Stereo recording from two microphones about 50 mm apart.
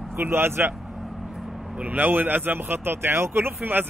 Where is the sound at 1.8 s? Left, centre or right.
Right.